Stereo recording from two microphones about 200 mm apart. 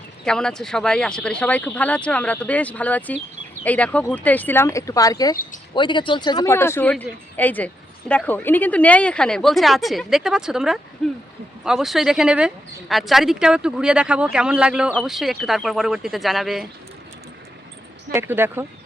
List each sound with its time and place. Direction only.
0.3 s speech: 5° left (ahead or behind)
18.1 s speech: 10° right (ahead or behind)